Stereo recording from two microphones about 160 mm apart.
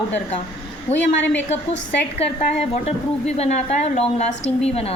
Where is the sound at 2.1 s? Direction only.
40° left (ahead or behind).